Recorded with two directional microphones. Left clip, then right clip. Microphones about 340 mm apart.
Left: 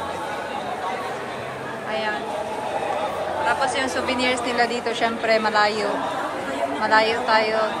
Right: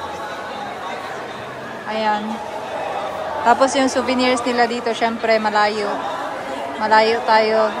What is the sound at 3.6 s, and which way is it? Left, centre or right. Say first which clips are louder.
A woman's voice: right 5 dB; centre.